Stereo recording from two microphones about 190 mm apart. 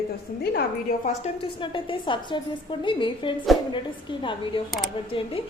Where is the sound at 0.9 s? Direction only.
40° left (ahead or behind).